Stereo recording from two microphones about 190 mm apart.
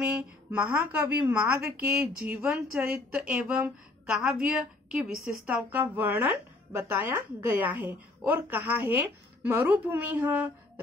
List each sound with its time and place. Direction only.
0.0 s a woman's voice: 5° right (ahead or behind)